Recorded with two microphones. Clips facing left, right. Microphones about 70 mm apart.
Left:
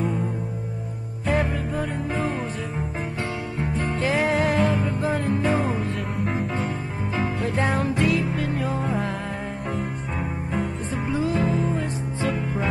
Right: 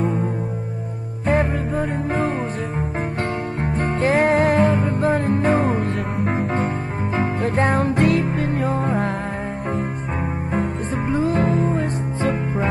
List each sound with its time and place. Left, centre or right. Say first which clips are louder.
0.0 s music: right 4 dB; right
3.7 s music: right 5 dB; right
10.5 s music: right 4 dB; right